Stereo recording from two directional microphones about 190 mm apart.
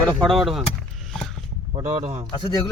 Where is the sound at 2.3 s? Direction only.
25° left (ahead or behind).